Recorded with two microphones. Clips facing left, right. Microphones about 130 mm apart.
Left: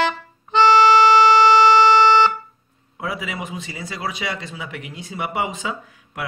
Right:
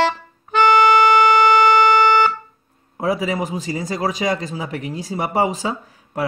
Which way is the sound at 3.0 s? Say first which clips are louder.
Right 8 dB; 35° right (ahead or behind).